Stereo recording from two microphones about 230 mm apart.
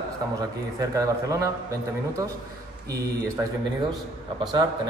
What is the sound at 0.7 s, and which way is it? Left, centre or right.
Speech, centre.